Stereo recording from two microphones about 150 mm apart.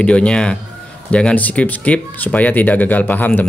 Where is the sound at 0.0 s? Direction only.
5° left (ahead or behind).